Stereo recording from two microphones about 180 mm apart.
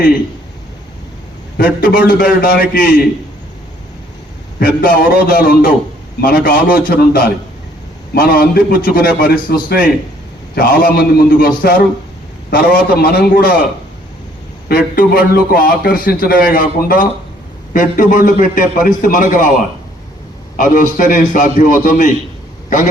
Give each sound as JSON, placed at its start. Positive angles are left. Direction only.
{"t": 1.5, "sound": "a man's voice", "side_deg": 55}
{"t": 4.6, "sound": "a man's voice", "side_deg": 55}
{"t": 14.7, "sound": "a man's voice", "side_deg": 55}
{"t": 20.6, "sound": "a man's voice", "side_deg": 45}